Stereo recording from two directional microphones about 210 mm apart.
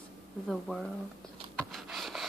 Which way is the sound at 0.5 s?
Centre (ahead or behind).